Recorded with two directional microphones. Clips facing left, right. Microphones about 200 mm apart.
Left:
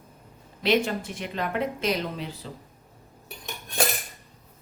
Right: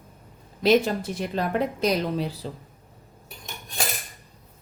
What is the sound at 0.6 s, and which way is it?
A woman's voice, 40° right (ahead or behind).